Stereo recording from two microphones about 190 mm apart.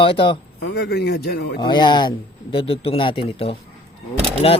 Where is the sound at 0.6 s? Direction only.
60° left (ahead or behind).